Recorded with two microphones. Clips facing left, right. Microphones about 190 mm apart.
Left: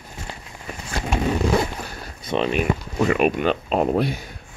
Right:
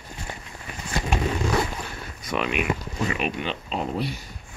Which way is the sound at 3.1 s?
50° left (ahead or behind).